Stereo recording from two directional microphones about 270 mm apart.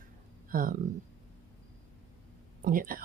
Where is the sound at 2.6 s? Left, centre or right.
Right.